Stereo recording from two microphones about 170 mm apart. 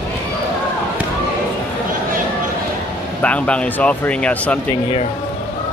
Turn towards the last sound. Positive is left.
turn(degrees=5)  # may be behind; listen again after turning